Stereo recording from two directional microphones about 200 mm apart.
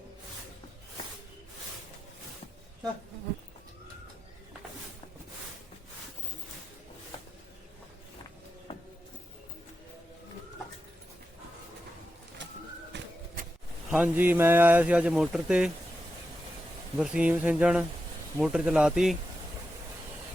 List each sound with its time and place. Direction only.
12.9 s a sound: 60° right (ahead or behind)
13.9 s speech: 5° right (ahead or behind)
17.0 s speech: 5° right (ahead or behind)